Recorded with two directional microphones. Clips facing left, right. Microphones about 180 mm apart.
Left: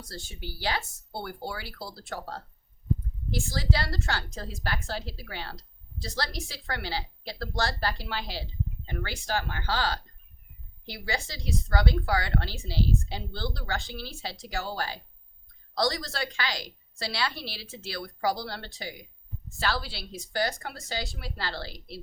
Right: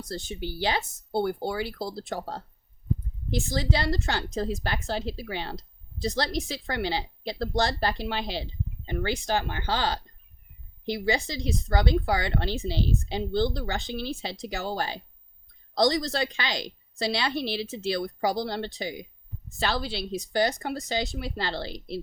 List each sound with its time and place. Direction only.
0.1 s a woman's voice: 20° right (ahead or behind)